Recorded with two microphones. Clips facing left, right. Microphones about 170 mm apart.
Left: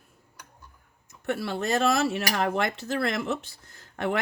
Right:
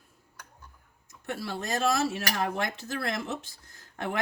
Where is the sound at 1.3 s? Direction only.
65° left (ahead or behind).